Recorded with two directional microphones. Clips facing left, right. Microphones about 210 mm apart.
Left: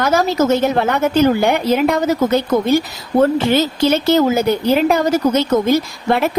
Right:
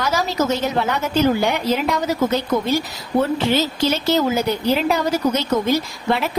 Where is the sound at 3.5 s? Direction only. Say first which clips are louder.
Left 4 dB; 55° left (ahead or behind).